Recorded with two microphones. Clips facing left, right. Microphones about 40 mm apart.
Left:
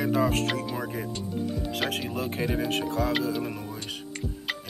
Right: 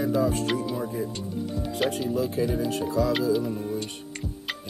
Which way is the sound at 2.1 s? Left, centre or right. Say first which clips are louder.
Right 3 dB; left.